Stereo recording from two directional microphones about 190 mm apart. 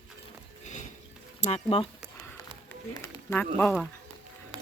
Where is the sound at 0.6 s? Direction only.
40° left (ahead or behind).